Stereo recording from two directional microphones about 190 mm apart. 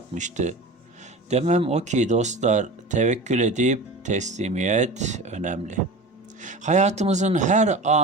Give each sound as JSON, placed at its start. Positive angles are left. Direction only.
{"t": 0.1, "sound": "speech", "side_deg": -40}